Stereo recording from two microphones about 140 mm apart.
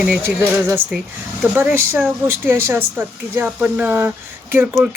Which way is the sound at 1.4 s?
15° right (ahead or behind).